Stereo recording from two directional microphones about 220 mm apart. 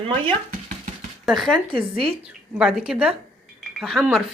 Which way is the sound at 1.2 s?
Centre (ahead or behind).